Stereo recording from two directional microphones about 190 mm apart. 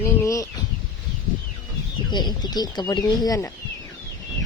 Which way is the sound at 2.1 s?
20° left (ahead or behind).